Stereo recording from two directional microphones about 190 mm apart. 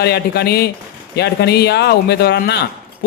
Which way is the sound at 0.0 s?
60° left (ahead or behind).